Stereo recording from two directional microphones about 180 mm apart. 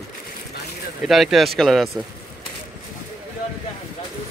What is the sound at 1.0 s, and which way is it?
Speech, centre (ahead or behind).